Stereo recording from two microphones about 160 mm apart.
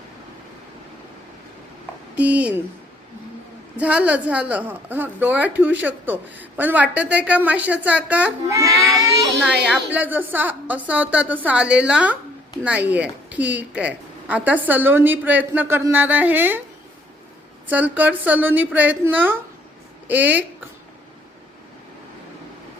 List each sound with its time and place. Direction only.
2.1 s a woman's voice: 10° right (ahead or behind)
3.8 s a woman's voice: 10° right (ahead or behind)
8.4 s child singing: 20° right (ahead or behind)
9.6 s a woman's voice: 10° right (ahead or behind)
17.7 s a woman's voice: 10° right (ahead or behind)